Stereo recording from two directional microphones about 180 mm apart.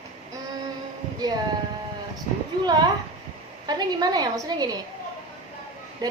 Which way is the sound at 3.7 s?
20° right (ahead or behind).